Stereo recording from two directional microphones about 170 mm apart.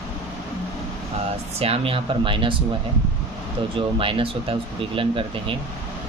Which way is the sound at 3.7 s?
30° right (ahead or behind).